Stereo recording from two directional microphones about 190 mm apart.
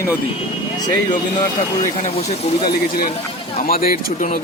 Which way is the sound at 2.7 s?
55° left (ahead or behind).